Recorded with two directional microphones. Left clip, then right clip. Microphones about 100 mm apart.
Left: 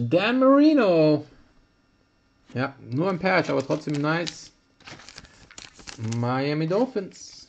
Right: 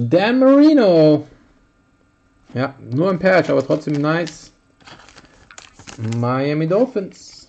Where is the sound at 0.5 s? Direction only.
25° right (ahead or behind).